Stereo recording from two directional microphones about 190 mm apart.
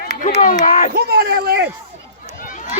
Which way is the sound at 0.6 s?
45° left (ahead or behind).